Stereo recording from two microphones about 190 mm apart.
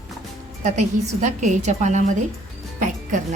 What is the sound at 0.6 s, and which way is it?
A woman's voice, 40° right (ahead or behind).